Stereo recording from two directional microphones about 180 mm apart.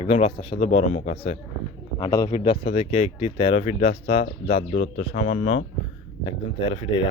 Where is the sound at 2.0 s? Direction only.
20° left (ahead or behind).